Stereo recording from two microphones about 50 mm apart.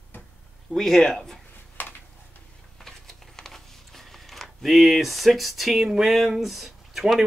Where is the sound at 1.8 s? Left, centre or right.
Left.